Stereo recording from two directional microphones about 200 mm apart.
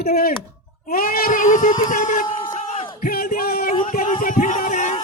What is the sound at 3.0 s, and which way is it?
Music, 45° left (ahead or behind).